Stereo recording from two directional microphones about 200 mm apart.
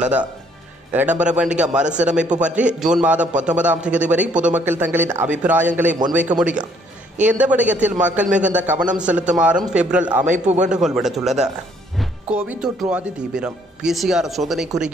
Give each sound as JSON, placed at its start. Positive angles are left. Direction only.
{"t": 0.0, "sound": "a man's voice", "side_deg": -5}
{"t": 10.2, "sound": "a man's voice", "side_deg": -35}
{"t": 10.7, "sound": "speech", "side_deg": 0}